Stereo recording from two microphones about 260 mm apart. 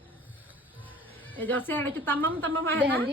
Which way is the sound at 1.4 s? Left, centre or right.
Centre.